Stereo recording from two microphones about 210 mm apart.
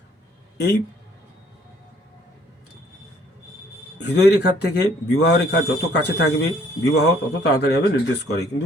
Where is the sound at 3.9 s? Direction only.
55° left (ahead or behind).